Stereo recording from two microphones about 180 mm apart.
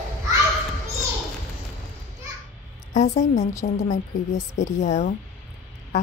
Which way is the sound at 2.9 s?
40° left (ahead or behind).